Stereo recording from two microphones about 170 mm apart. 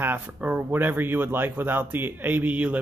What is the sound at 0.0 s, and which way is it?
Speech, 10° right (ahead or behind).